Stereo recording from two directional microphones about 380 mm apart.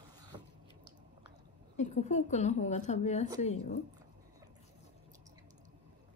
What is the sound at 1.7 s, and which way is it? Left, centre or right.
A woman's voice, centre.